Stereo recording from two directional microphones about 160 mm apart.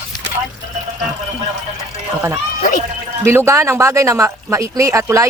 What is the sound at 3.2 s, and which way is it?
Speech, 15° right (ahead or behind).